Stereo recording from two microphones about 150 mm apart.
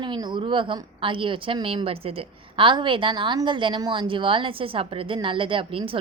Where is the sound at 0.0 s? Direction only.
30° right (ahead or behind).